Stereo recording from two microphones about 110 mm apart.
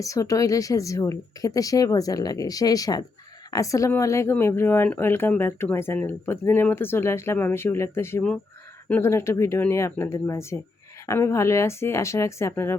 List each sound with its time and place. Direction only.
0.0 s a woman's voice: 30° left (ahead or behind)